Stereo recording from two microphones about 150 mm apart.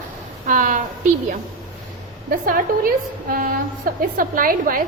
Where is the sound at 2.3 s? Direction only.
70° right (ahead or behind).